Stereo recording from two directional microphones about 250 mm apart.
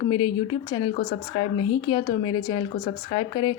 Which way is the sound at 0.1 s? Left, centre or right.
Centre.